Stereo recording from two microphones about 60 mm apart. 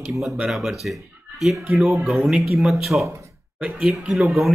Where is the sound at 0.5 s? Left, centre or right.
Centre.